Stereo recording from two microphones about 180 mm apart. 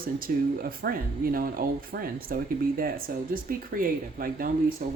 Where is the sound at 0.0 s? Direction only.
55° right (ahead or behind).